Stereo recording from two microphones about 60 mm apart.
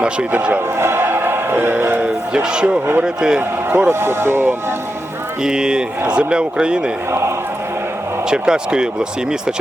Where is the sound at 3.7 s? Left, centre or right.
Right.